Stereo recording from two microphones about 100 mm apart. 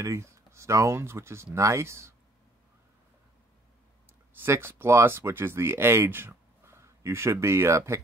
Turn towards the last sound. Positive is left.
turn(degrees=-30)  # may be behind; listen again after turning